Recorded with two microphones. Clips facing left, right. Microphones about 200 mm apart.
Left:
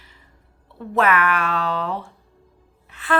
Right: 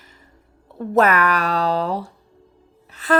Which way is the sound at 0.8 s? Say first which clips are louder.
Right 3 dB; 40° right (ahead or behind).